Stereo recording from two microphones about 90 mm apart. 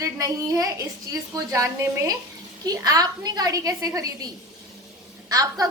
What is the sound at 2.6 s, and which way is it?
A woman's voice, 45° right (ahead or behind).